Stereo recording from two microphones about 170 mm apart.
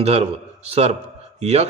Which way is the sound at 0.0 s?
40° right (ahead or behind).